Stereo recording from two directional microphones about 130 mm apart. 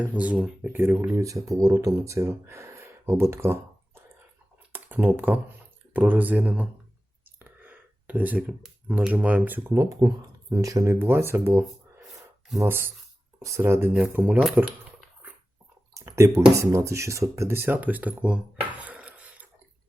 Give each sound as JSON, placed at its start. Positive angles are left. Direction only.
{"t": 0.0, "sound": "speech", "side_deg": -10}
{"t": 4.7, "sound": "typing", "side_deg": -15}
{"t": 5.9, "sound": "speech", "side_deg": -15}
{"t": 7.3, "sound": "a sound", "side_deg": -15}
{"t": 9.7, "sound": "speech", "side_deg": -25}
{"t": 16.0, "sound": "speech", "side_deg": -25}
{"t": 18.8, "sound": "a sound", "side_deg": -10}